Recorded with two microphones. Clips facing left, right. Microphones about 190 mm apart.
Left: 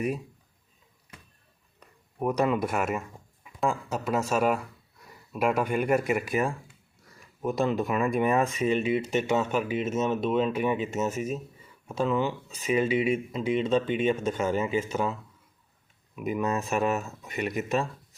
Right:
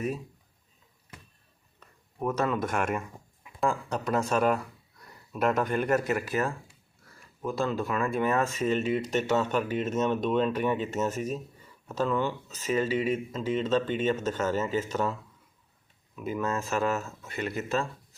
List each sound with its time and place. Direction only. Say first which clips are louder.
1.8 s speech: left 2 dB; 15° left (ahead or behind)